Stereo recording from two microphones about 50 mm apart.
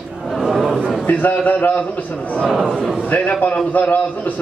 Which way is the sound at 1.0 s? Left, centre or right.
Left.